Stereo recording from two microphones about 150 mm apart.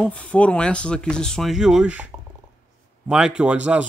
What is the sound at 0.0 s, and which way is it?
Speech, 10° left (ahead or behind).